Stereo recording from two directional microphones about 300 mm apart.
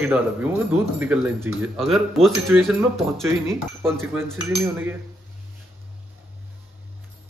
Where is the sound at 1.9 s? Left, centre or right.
Centre.